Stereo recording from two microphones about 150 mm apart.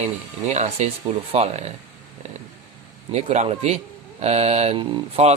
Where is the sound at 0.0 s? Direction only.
50° right (ahead or behind).